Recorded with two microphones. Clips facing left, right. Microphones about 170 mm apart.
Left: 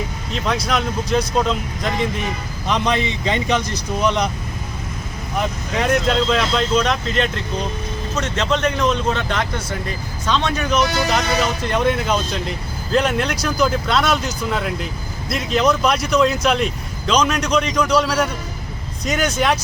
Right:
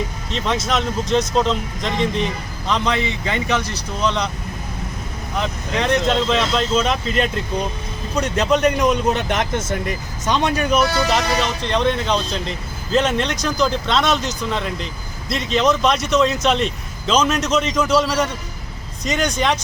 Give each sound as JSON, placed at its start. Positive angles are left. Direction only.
{"t": 0.3, "sound": "speech", "side_deg": 0}
{"t": 2.6, "sound": "speech", "side_deg": 15}
{"t": 5.4, "sound": "speech", "side_deg": 5}
{"t": 11.7, "sound": "speech", "side_deg": 10}